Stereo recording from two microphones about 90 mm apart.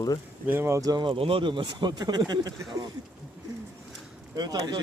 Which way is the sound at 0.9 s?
60° right (ahead or behind).